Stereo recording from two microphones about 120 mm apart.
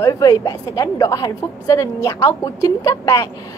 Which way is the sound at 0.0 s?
30° left (ahead or behind).